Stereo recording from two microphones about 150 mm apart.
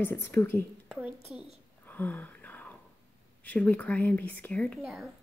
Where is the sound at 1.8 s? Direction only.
10° left (ahead or behind).